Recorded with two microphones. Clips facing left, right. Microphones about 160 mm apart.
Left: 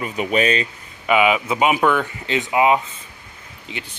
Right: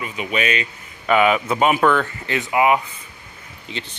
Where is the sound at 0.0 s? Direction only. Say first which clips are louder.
Left 4 dB; 40° left (ahead or behind).